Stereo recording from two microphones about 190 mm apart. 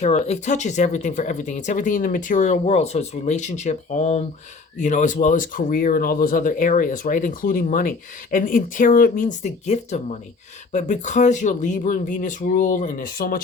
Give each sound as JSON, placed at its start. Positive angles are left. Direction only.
{"t": 0.0, "sound": "speech", "side_deg": 35}